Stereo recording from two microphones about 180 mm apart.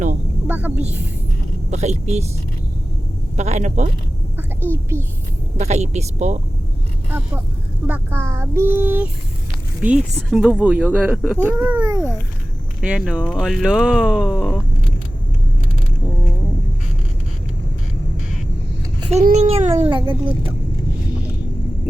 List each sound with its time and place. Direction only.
0.4 s speech: 10° right (ahead or behind)
1.7 s a child's voice: 40° right (ahead or behind)
3.3 s a child's voice: 40° right (ahead or behind)
4.4 s a woman's voice: 10° right (ahead or behind)
5.5 s a child's voice: 40° right (ahead or behind)
7.9 s speech: 10° right (ahead or behind)
12.8 s speech: 5° right (ahead or behind)
19.1 s a child's voice: 40° right (ahead or behind)